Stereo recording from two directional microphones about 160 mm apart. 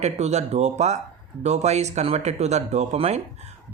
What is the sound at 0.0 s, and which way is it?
Speech, 45° right (ahead or behind).